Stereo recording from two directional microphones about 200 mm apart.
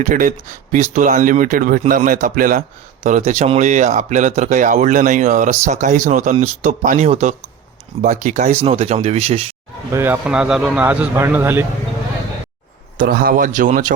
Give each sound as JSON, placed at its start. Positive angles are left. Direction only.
{"t": 0.0, "sound": "speech", "side_deg": -40}
{"t": 9.9, "sound": "speech", "side_deg": -10}
{"t": 13.0, "sound": "speech", "side_deg": -45}